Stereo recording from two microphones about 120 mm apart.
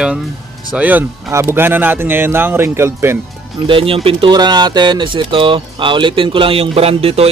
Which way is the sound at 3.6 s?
50° right (ahead or behind).